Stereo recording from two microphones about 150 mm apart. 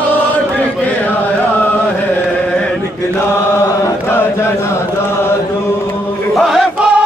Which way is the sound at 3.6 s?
15° left (ahead or behind).